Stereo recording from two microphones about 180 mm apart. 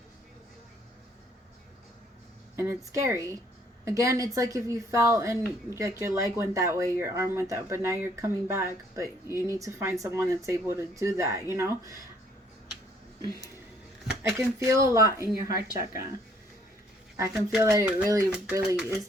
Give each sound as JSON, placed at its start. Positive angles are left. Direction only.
{"t": 2.6, "sound": "a woman's voice", "side_deg": -15}
{"t": 14.3, "sound": "a woman's voice", "side_deg": -15}
{"t": 17.6, "sound": "a woman's voice", "side_deg": -15}